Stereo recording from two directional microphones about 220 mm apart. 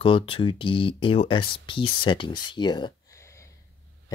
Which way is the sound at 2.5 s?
20° left (ahead or behind).